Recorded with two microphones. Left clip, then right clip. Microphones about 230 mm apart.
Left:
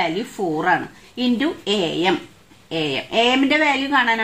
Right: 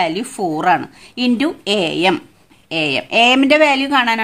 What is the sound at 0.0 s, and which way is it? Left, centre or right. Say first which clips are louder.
A woman's voice: right 4 dB; right.